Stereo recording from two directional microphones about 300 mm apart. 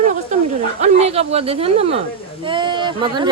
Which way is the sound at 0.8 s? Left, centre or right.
Right.